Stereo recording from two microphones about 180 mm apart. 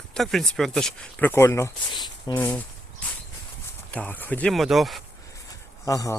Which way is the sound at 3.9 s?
10° left (ahead or behind).